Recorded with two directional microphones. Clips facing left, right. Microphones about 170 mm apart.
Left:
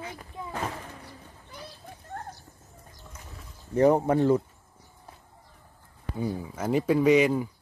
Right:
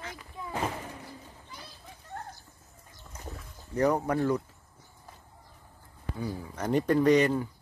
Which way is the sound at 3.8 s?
25° left (ahead or behind).